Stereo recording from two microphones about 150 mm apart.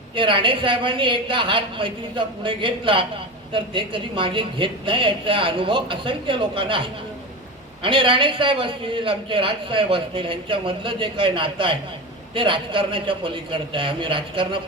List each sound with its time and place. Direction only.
0.2 s a man's voice: 35° right (ahead or behind)